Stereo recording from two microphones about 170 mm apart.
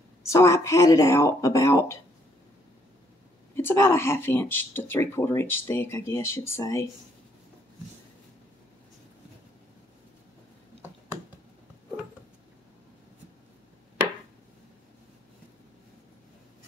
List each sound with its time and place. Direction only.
0.2 s speech: 15° left (ahead or behind)
3.5 s speech: 15° left (ahead or behind)